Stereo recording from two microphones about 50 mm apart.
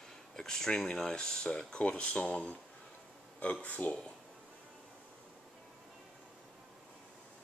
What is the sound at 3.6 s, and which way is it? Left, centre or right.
Speech, left.